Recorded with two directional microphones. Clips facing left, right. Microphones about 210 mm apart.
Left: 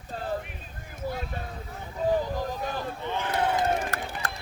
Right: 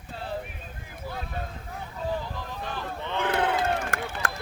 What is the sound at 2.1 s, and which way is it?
Horse, 45° left (ahead or behind).